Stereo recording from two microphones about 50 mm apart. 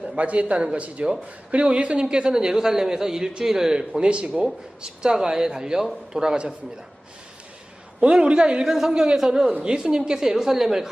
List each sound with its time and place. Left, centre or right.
0.2 s a man's voice: right
8.0 s a man's voice: centre
8.6 s a woman's voice: centre